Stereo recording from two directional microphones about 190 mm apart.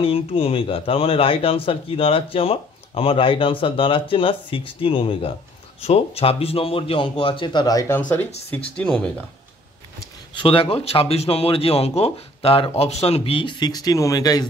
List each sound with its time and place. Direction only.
0.0 s speech: 30° left (ahead or behind)
8.6 s speech: 5° left (ahead or behind)
9.9 s speech: 25° left (ahead or behind)